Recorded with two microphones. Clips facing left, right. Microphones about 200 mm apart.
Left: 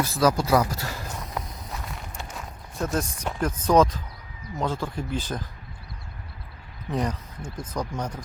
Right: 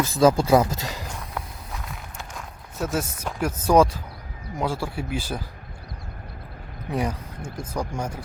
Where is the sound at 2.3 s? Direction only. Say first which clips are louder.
Even; 5° right (ahead or behind).